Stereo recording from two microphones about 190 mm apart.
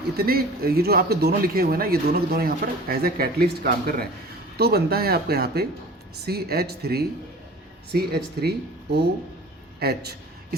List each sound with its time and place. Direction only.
0.2 s speech: 55° right (ahead or behind)